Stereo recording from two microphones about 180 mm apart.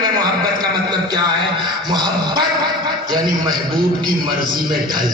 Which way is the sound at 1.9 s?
25° right (ahead or behind).